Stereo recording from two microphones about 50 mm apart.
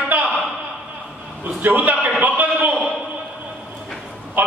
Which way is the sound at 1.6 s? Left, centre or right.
Right.